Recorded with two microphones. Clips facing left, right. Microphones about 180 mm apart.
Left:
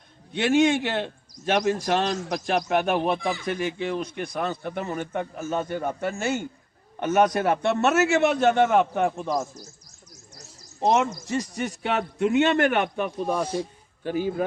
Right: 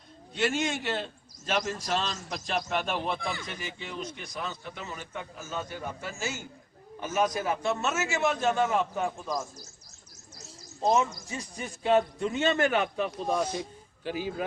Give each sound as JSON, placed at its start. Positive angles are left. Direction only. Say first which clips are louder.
{"t": 0.3, "sound": "a man's voice", "louder": "left 9 dB", "side_deg": 60}
{"t": 10.8, "sound": "a man's voice", "louder": "left 3 dB", "side_deg": 70}
{"t": 13.4, "sound": "a man's voice", "louder": "left 4 dB", "side_deg": 30}